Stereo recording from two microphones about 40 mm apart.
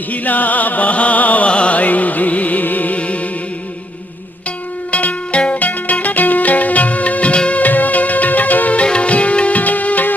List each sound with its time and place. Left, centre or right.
0.1 s music: left
1.5 s music: left
4.9 s music: left
7.6 s music: left
8.8 s music: left
9.6 s music: left